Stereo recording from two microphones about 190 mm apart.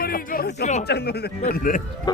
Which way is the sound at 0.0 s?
50° left (ahead or behind).